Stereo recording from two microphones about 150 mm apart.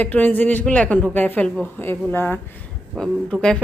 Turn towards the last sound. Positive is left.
turn(degrees=5)  # may be behind; listen again after turning